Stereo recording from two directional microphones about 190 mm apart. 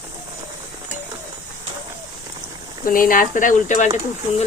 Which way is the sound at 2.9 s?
45° left (ahead or behind).